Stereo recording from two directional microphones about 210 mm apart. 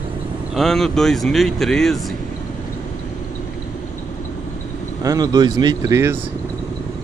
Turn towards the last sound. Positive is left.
turn(degrees=-15)  # may be behind; listen again after turning